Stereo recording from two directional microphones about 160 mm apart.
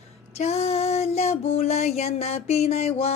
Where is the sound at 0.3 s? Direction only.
40° left (ahead or behind).